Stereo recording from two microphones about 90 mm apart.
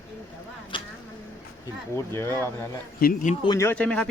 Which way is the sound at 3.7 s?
15° left (ahead or behind).